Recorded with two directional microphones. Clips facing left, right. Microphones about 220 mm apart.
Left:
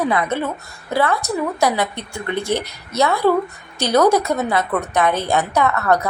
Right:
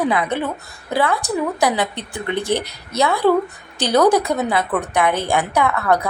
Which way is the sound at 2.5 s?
15° left (ahead or behind).